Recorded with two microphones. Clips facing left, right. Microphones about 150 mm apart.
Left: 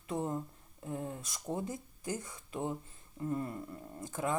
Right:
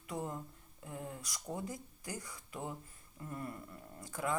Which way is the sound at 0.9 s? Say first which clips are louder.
Left 5 dB; 25° left (ahead or behind).